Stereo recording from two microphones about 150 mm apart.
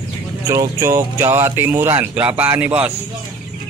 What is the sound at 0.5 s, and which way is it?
Speech, 20° right (ahead or behind).